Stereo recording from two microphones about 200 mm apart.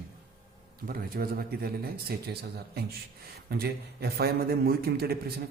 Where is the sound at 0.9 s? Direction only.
45° right (ahead or behind).